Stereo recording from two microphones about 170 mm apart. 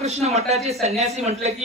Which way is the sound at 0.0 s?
40° right (ahead or behind).